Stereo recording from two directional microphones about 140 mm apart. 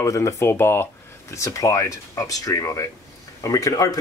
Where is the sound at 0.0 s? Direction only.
20° left (ahead or behind).